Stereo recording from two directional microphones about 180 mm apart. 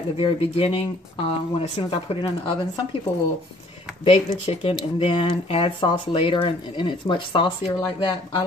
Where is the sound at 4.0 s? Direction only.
30° left (ahead or behind).